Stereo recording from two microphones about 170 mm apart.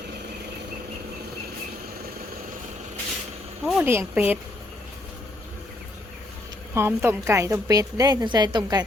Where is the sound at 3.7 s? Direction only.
10° right (ahead or behind).